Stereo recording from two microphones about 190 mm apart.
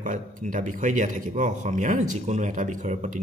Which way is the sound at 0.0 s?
45° right (ahead or behind).